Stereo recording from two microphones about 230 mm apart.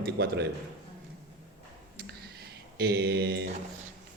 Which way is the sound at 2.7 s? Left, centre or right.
Right.